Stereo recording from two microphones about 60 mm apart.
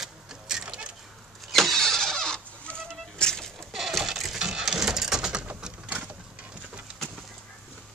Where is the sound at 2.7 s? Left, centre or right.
Centre.